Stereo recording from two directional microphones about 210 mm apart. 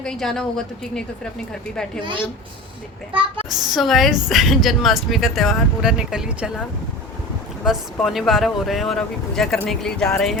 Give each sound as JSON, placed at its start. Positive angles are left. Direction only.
{"t": 0.0, "sound": "a woman's voice", "side_deg": 5}
{"t": 3.1, "sound": "speech", "side_deg": -25}
{"t": 3.5, "sound": "a woman's voice", "side_deg": 0}
{"t": 7.6, "sound": "a woman's voice", "side_deg": 0}